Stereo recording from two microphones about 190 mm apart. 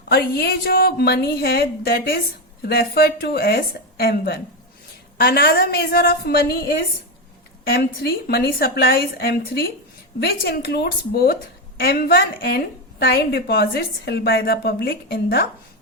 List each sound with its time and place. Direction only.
0.1 s a woman's voice: 55° left (ahead or behind)